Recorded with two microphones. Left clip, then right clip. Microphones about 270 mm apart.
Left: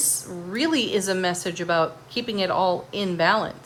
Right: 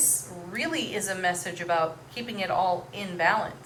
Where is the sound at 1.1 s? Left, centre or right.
Centre.